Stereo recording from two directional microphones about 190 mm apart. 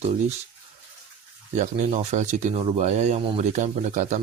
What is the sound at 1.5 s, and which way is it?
Speech, 40° right (ahead or behind).